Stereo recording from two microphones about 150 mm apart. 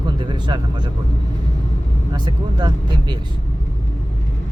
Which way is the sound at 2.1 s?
30° right (ahead or behind).